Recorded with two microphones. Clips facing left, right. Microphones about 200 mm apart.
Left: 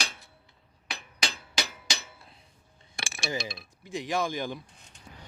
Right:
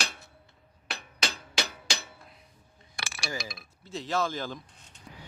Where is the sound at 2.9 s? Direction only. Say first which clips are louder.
Left 3 dB; 25° left (ahead or behind).